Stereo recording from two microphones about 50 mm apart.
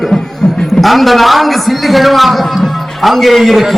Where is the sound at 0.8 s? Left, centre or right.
Centre.